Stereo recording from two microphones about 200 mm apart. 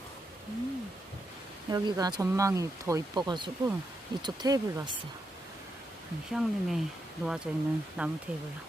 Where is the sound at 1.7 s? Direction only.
20° right (ahead or behind).